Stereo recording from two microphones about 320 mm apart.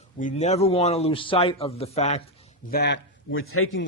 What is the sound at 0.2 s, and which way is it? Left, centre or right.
A man's voice, left.